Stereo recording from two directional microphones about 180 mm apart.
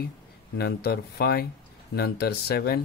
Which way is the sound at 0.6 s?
60° left (ahead or behind).